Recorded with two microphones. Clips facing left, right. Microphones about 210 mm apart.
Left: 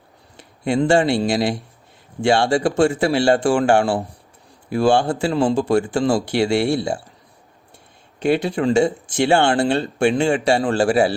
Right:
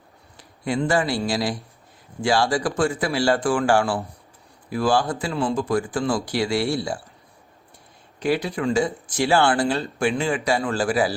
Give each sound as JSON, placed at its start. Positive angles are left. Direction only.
{"t": 0.3, "sound": "a sound", "side_deg": 25}
{"t": 0.8, "sound": "speech", "side_deg": 25}
{"t": 8.2, "sound": "speech", "side_deg": 25}